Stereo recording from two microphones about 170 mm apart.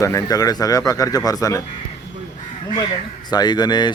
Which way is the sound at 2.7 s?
25° left (ahead or behind).